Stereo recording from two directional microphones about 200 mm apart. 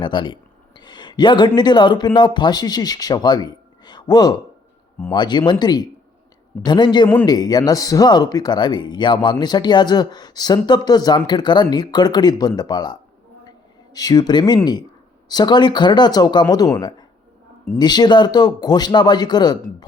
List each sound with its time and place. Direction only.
0.0 s speech: 25° left (ahead or behind)